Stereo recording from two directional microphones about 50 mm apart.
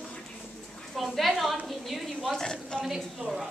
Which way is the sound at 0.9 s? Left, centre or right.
Centre.